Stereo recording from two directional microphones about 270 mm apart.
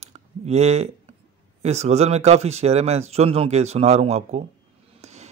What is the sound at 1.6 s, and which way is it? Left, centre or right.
Speech, right.